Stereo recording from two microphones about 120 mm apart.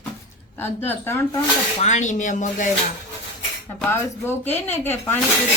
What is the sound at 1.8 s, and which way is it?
Speech, 85° left.